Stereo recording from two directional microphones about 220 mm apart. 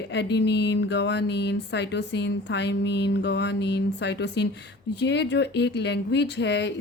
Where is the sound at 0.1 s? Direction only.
50° left (ahead or behind).